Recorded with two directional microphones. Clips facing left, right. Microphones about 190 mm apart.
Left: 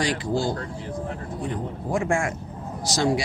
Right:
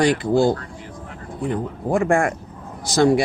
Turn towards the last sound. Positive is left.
turn(degrees=-55)  # may be behind; listen again after turning